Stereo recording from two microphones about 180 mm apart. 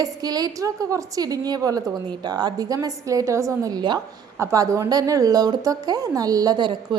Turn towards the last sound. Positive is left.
turn(degrees=-25)  # may be behind; listen again after turning